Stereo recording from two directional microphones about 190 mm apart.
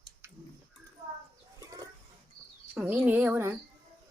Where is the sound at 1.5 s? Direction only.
20° right (ahead or behind).